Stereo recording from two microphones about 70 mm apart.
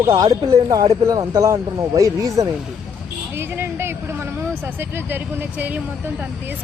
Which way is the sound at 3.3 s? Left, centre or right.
Right.